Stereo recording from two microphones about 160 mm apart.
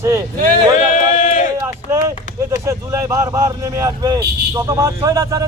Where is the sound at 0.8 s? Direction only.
50° left (ahead or behind).